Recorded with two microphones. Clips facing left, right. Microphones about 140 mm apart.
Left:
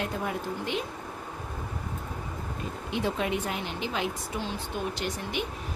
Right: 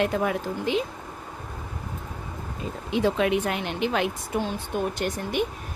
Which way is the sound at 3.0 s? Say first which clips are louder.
Right 7 dB; 90° right.